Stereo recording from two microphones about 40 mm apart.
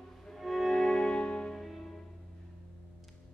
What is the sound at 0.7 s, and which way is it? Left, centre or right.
Music, left.